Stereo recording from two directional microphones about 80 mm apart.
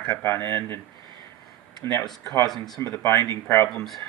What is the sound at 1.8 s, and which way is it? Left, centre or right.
Speech, left.